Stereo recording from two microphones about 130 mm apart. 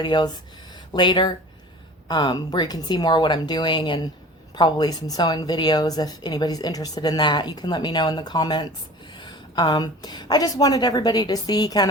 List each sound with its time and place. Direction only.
0.0 s a woman's voice: 35° left (ahead or behind)
0.7 s a sound: 35° left (ahead or behind)
2.0 s a woman's voice: 35° left (ahead or behind)